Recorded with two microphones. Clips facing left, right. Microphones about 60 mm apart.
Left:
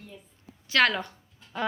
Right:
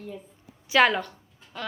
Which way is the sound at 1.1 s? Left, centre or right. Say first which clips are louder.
Left 1 dB; centre.